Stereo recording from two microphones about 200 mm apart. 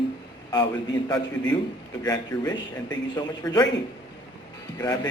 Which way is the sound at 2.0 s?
20° left (ahead or behind).